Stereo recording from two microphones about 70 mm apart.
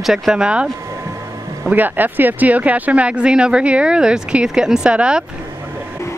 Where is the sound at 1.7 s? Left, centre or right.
Right.